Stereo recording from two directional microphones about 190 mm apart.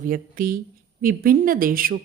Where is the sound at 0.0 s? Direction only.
50° right (ahead or behind).